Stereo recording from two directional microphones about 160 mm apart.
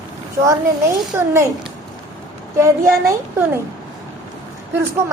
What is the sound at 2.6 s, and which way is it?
A woman's voice, 15° right (ahead or behind).